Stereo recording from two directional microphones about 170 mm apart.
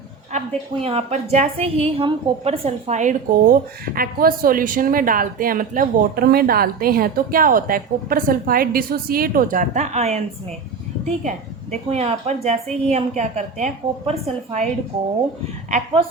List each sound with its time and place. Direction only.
0.3 s a woman's voice: 35° right (ahead or behind)